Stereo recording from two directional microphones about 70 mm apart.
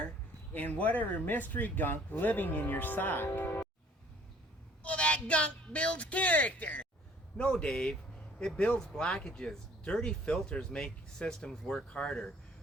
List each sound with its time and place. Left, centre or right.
0.5 s speech: left
4.8 s speech: centre